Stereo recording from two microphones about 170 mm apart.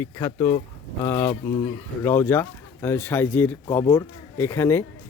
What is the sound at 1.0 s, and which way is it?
Speech, 15° left (ahead or behind).